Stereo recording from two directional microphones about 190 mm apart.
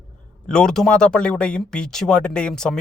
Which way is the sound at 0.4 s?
5° left (ahead or behind).